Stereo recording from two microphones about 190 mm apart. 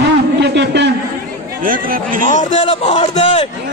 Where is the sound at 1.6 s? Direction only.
45° right (ahead or behind).